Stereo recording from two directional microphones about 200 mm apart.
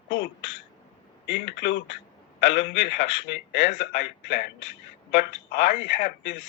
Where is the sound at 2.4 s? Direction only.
60° left (ahead or behind).